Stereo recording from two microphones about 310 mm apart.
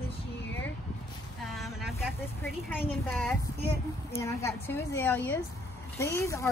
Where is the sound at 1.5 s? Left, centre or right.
Centre.